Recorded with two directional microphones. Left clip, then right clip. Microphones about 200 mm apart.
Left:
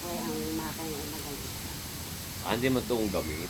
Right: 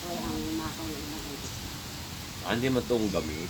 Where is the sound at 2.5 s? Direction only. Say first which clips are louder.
Even; 55° right (ahead or behind).